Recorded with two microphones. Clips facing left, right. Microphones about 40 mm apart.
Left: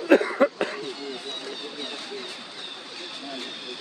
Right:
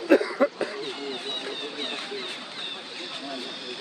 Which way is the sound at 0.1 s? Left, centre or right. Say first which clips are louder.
Left 1 dB; left.